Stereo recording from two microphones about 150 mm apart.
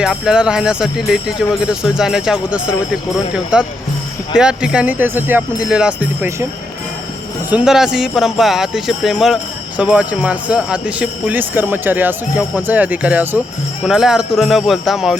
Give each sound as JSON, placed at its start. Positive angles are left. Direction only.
{"t": 0.0, "sound": "speech", "side_deg": -5}
{"t": 7.5, "sound": "speech", "side_deg": -5}